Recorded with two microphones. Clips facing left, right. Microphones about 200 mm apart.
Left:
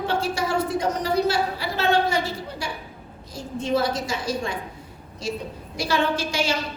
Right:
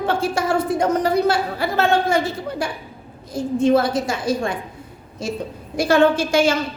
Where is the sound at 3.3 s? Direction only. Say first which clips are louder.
Right 8 dB; 55° right (ahead or behind).